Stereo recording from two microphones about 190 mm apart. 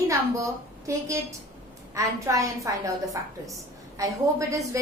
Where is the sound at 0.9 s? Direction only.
15° right (ahead or behind).